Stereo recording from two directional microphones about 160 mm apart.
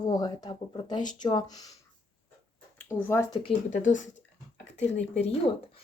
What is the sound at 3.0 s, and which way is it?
Speech, 15° left (ahead or behind).